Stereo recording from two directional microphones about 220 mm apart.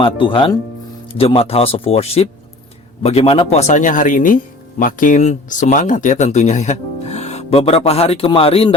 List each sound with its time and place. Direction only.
0.0 s speech: 20° left (ahead or behind)